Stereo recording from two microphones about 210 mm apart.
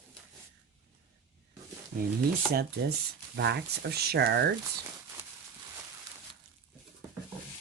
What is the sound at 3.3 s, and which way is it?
Speech, 55° right (ahead or behind).